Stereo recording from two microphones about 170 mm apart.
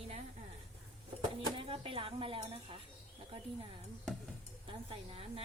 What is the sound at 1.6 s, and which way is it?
A woman's voice, 30° right (ahead or behind).